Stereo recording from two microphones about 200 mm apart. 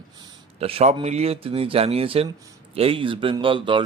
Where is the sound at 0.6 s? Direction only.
30° right (ahead or behind).